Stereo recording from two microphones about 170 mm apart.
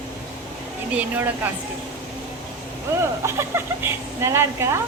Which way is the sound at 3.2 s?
15° right (ahead or behind).